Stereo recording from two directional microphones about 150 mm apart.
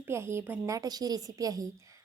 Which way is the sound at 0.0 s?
15° right (ahead or behind).